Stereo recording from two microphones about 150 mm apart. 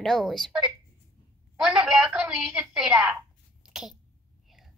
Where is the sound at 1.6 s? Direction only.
5° right (ahead or behind).